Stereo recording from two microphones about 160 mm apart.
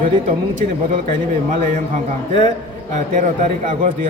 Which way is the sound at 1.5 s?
50° right (ahead or behind).